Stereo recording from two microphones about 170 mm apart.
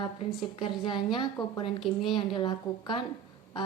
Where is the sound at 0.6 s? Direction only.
30° left (ahead or behind).